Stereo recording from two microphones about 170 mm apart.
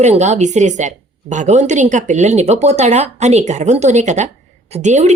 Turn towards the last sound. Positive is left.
turn(degrees=-40)  # may be behind; listen again after turning